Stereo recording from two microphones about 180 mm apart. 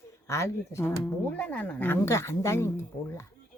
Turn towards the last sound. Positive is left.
turn(degrees=15)  # may be behind; listen again after turning